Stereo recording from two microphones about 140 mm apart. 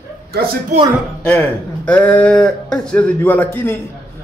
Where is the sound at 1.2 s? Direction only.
15° left (ahead or behind).